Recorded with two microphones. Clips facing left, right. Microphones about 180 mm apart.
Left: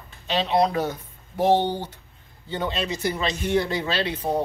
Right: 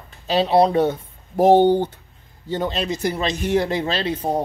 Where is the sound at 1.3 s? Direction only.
50° right (ahead or behind).